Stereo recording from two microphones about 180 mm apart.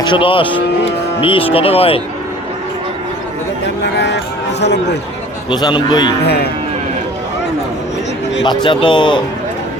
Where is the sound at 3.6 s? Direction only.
70° left (ahead or behind).